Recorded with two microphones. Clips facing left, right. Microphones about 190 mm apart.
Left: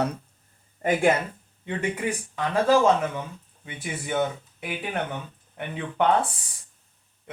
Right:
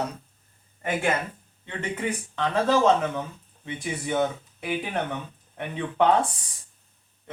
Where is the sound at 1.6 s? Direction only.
10° left (ahead or behind).